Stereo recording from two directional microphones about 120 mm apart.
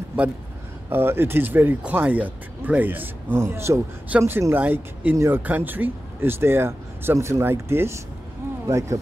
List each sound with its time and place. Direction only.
0.8 s speech: 20° right (ahead or behind)